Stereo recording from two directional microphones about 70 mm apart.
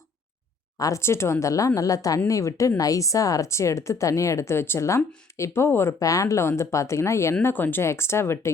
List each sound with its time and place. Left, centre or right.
0.8 s speech: left
1.0 s a woman's voice: left
6.0 s a woman's voice: left
7.4 s speech: left
7.9 s speech: left